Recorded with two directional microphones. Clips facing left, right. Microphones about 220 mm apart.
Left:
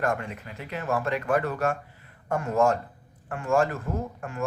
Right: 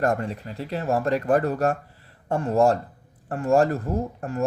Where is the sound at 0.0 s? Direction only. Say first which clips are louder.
Right 4 dB; 40° right (ahead or behind).